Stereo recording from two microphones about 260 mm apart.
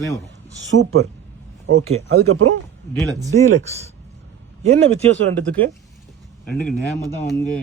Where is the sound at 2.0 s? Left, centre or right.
Right.